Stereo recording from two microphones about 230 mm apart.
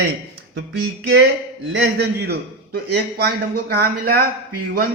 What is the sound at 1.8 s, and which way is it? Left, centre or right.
A man's voice, right.